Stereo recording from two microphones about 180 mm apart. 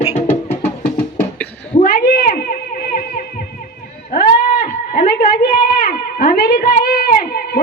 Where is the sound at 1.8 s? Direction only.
55° left (ahead or behind).